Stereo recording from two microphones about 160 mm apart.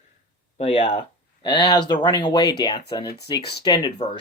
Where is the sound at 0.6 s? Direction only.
35° left (ahead or behind).